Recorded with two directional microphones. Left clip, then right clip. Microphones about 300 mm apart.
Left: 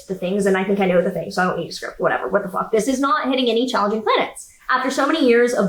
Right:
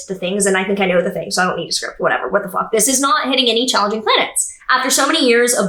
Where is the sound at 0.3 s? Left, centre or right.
Centre.